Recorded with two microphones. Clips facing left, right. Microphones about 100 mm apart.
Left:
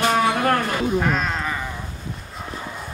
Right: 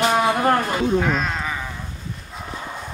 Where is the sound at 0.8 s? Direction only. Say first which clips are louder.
Right 1 dB; centre (ahead or behind).